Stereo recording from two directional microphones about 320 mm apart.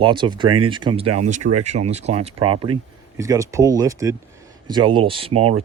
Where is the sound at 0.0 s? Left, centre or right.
Centre.